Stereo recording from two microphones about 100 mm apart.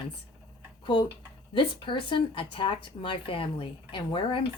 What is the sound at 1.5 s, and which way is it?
Speech, 55° left (ahead or behind).